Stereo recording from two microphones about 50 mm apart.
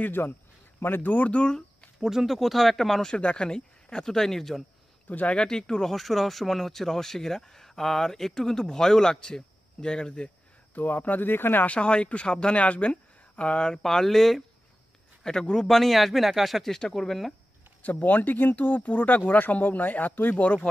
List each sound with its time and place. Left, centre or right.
0.0 s speech: left
1.1 s speech: left
2.0 s speech: centre
3.0 s speech: centre
5.0 s speech: left
5.3 s speech: centre
10.7 s speech: left
11.6 s speech: left
13.8 s speech: centre
16.7 s speech: centre
17.8 s speech: left